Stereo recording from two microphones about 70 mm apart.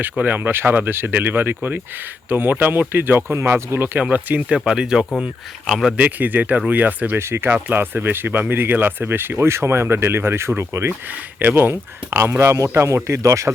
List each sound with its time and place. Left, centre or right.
0.0 s speech: right; by 5.9 s centre
6.0 s speech: right
7.2 s speech: right
11.1 s speech: right